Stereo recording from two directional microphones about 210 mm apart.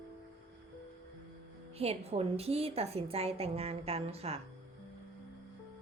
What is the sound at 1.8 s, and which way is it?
A woman's voice, 30° right (ahead or behind).